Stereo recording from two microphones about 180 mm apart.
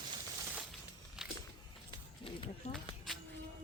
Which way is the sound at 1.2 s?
Centre (ahead or behind).